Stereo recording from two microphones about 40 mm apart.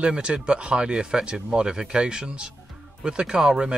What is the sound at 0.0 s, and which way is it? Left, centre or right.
Speech, right.